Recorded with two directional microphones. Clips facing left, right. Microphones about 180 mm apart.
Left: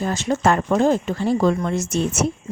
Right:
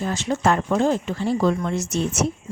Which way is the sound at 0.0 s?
45° left (ahead or behind).